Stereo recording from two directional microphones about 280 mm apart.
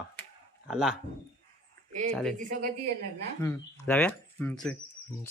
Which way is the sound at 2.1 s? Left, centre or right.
Centre.